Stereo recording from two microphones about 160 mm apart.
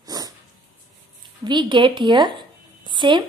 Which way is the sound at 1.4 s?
30° right (ahead or behind).